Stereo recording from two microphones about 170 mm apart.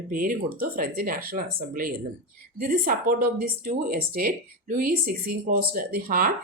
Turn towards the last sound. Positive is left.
turn(degrees=-55)  # may be behind; listen again after turning